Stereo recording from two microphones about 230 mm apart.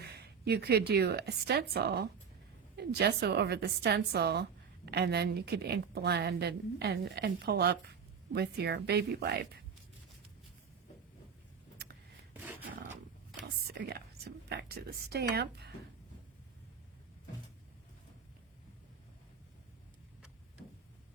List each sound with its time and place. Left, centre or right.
0.0 s a woman's voice: right
12.3 s rub: centre
13.4 s whispering: right